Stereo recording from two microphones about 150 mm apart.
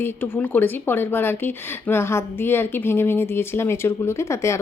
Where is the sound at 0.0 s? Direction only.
10° left (ahead or behind).